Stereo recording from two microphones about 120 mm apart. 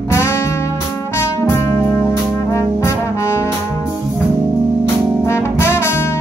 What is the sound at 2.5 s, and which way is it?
Brass instrument, 25° left (ahead or behind).